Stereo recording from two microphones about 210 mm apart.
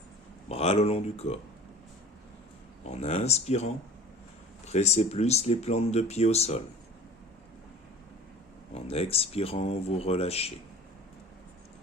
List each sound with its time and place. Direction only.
0.4 s speech: 30° left (ahead or behind)
2.9 s speech: 30° left (ahead or behind)
8.7 s speech: 30° left (ahead or behind)